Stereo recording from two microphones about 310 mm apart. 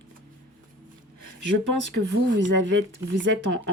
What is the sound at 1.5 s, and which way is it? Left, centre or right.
Speech, right.